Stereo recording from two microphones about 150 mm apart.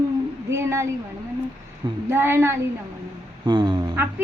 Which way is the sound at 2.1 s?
15° right (ahead or behind).